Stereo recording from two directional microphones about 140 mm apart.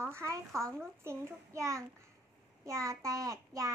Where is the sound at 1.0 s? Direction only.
20° right (ahead or behind).